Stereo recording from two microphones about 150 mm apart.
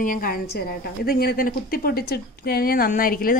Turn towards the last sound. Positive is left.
turn(degrees=70)  # may be behind; listen again after turning